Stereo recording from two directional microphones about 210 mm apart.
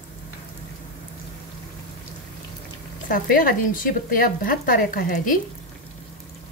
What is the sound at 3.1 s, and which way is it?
Speech, 40° left (ahead or behind).